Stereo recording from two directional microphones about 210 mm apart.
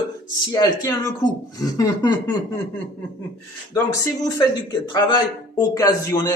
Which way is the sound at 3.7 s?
15° left (ahead or behind).